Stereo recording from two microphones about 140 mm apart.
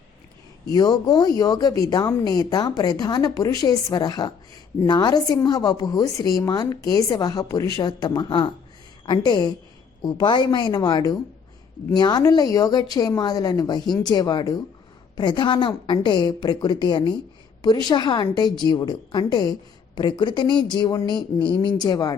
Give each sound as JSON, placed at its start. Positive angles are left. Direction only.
{"t": 0.7, "sound": "speech", "side_deg": 30}